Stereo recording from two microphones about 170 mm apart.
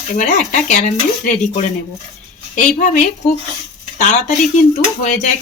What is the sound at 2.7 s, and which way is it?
Speech, 45° left (ahead or behind).